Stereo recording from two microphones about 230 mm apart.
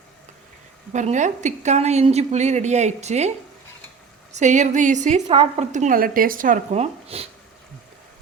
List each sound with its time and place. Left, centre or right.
0.9 s a woman's voice: right
4.4 s a woman's voice: right